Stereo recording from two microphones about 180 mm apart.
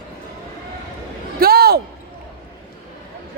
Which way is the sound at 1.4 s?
60° right (ahead or behind).